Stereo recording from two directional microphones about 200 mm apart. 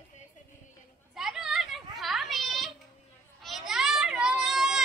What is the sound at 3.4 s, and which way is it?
Children playing, centre (ahead or behind).